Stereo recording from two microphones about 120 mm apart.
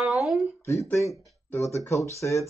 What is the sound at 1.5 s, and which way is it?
Speech, 25° left (ahead or behind).